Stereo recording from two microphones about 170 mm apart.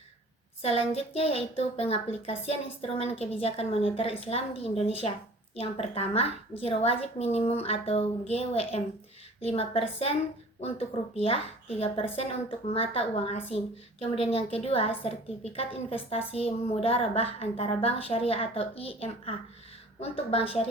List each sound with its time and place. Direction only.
0.6 s a woman's voice: 35° left (ahead or behind)